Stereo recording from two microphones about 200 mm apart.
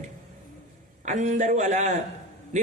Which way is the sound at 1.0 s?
35° right (ahead or behind).